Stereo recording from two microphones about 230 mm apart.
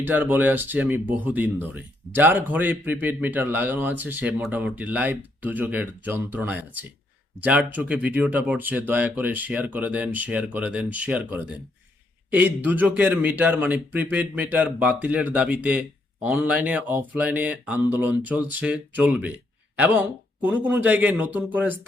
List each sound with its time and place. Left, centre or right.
0.0 s speech: centre